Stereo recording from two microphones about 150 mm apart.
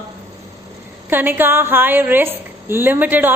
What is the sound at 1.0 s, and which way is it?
A woman's voice, 15° right (ahead or behind).